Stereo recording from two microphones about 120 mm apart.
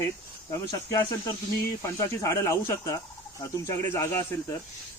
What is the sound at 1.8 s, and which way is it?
A man's voice, 25° left (ahead or behind).